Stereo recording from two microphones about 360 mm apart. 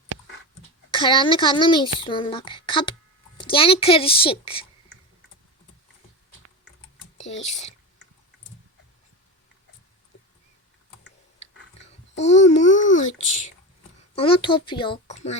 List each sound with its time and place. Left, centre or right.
0.9 s a child's voice: centre
7.4 s a child's voice: centre
12.2 s a child's voice: centre
14.2 s a child's voice: centre